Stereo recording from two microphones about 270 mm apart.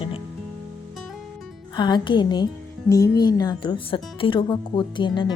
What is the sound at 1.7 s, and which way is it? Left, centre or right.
Speech, centre.